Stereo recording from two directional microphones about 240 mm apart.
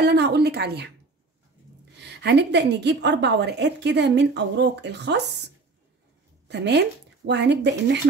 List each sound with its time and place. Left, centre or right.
0.0 s a sound: right
2.0 s a woman's voice: right
6.4 s a woman's voice: right